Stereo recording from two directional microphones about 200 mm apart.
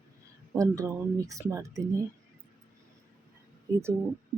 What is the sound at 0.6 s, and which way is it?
Speech, 15° right (ahead or behind).